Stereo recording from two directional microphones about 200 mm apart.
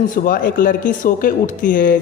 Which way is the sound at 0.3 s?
45° left (ahead or behind).